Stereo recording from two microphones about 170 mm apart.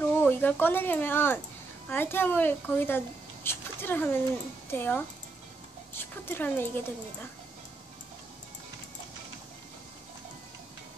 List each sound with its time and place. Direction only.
0.2 s a woman's voice: 10° left (ahead or behind)